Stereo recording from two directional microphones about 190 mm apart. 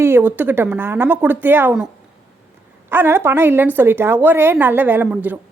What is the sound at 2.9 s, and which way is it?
A woman's voice, 10° right (ahead or behind).